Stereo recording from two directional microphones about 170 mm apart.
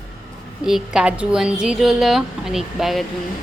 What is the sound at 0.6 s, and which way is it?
A woman's voice, 5° right (ahead or behind).